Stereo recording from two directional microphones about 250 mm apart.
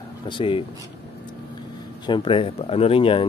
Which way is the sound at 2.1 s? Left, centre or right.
Centre.